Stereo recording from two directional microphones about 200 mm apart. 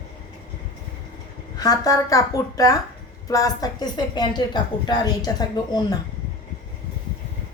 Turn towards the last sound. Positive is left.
turn(degrees=20)  # may be behind; listen again after turning